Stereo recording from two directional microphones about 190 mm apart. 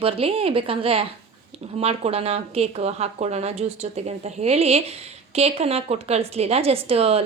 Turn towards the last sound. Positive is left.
turn(degrees=-30)  # may be behind; listen again after turning